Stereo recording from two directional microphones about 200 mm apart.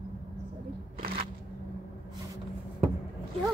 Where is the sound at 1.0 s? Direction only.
45° right (ahead or behind).